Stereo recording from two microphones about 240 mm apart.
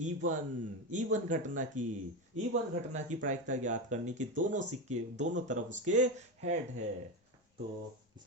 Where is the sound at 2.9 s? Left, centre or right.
Right.